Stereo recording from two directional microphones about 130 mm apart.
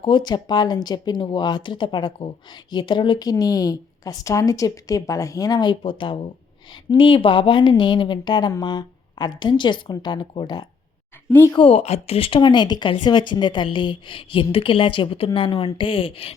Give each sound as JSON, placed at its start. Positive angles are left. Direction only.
{"t": 0.0, "sound": "speech", "side_deg": 35}
{"t": 5.8, "sound": "speech", "side_deg": 40}
{"t": 11.3, "sound": "speech", "side_deg": 15}
{"t": 11.5, "sound": "a woman's voice", "side_deg": 45}